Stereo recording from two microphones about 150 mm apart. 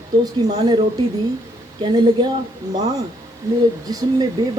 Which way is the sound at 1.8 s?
30° right (ahead or behind).